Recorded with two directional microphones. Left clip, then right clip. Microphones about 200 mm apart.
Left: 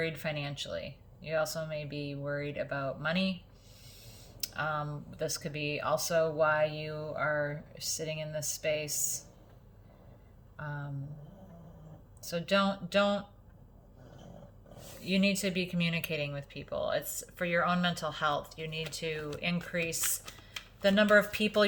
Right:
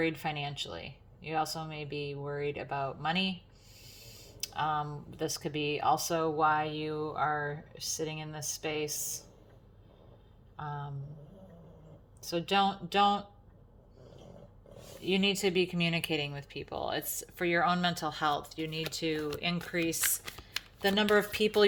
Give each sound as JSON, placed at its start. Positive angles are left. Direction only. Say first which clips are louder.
{"t": 0.0, "sound": "speech", "louder": "right 2 dB", "side_deg": -35}
{"t": 12.2, "sound": "speech", "louder": "right 1 dB", "side_deg": -35}
{"t": 15.0, "sound": "speech", "louder": "right 2 dB", "side_deg": -40}